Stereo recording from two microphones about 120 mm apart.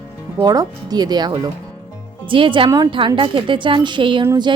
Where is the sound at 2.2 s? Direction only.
45° right (ahead or behind).